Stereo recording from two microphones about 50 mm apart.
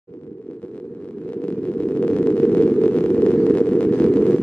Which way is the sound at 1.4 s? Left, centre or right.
Left.